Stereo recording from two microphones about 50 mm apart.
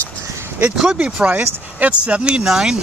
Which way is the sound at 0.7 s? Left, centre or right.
Centre.